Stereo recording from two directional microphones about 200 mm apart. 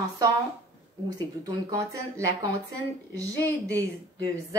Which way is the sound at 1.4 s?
15° right (ahead or behind).